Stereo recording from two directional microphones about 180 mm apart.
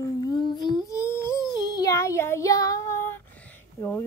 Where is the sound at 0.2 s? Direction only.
20° left (ahead or behind).